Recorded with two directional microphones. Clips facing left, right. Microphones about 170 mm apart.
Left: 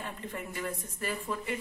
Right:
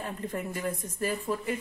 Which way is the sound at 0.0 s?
40° right (ahead or behind).